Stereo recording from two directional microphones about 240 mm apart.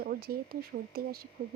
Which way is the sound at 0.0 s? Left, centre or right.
Right.